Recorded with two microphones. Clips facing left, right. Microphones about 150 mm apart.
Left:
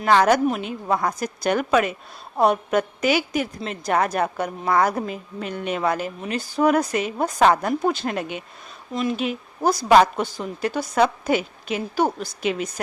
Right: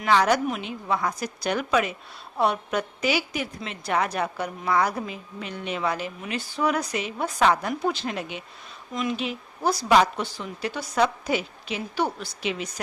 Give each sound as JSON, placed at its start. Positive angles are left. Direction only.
{"t": 0.0, "sound": "a woman's voice", "side_deg": 50}
{"t": 8.9, "sound": "speech", "side_deg": 35}
{"t": 9.1, "sound": "a woman's voice", "side_deg": 50}